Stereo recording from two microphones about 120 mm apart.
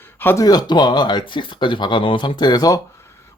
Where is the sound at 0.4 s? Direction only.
35° left (ahead or behind).